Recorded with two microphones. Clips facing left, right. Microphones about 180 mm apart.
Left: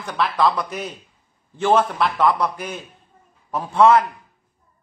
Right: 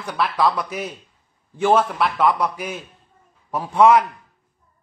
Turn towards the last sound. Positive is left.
turn(degrees=-10)  # may be behind; listen again after turning